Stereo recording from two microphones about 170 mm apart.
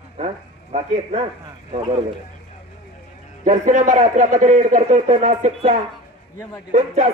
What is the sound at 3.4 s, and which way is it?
A man's voice, 50° right (ahead or behind).